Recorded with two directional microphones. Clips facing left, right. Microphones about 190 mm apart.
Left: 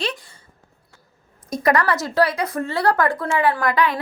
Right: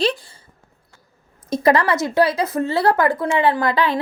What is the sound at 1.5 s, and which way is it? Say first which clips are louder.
A woman's voice: right 3 dB; 25° right (ahead or behind).